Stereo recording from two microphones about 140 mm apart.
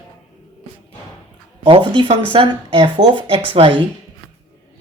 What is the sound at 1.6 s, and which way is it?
Speech, 40° right (ahead or behind).